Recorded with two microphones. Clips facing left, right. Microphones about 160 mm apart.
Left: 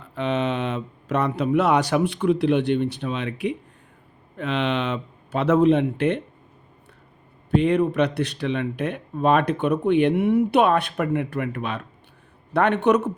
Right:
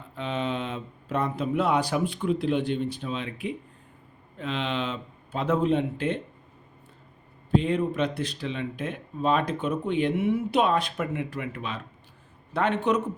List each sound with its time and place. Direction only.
0.1 s speech: 75° left (ahead or behind)
7.5 s speech: 70° left (ahead or behind)